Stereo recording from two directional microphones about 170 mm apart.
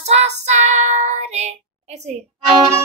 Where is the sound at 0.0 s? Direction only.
40° right (ahead or behind).